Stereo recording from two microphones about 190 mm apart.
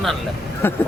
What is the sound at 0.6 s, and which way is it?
Speech, 10° left (ahead or behind).